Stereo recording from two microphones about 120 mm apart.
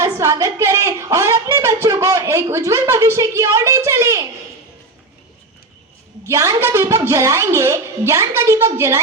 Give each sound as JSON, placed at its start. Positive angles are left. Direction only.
{"t": 0.0, "sound": "a woman's voice", "side_deg": -25}
{"t": 6.2, "sound": "a woman's voice", "side_deg": -25}